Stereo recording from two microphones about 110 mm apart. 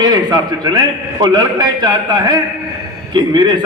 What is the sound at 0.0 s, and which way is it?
A man's voice, 40° right (ahead or behind).